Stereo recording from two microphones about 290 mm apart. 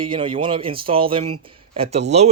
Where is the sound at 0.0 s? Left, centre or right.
Centre.